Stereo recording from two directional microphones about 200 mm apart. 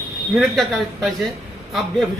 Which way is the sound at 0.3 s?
Centre (ahead or behind).